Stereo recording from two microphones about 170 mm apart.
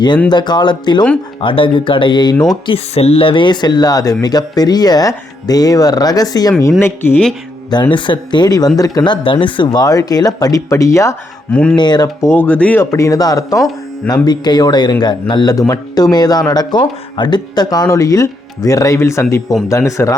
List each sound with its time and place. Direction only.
0.3 s speech: 25° left (ahead or behind)
2.7 s speech: 35° left (ahead or behind); by 6.9 s 15° left (ahead or behind)
7.7 s speech: 25° left (ahead or behind)
11.5 s speech: 5° left (ahead or behind)
11.8 s speech: 25° left (ahead or behind)